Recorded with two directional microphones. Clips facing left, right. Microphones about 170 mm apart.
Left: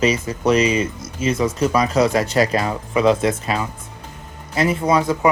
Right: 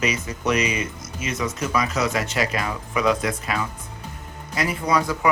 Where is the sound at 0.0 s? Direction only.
30° left (ahead or behind).